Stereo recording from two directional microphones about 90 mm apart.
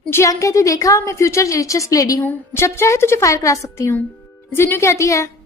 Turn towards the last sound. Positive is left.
turn(degrees=35)  # may be behind; listen again after turning